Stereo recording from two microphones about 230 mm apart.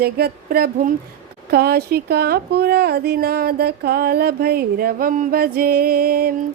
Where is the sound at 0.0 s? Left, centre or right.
Right.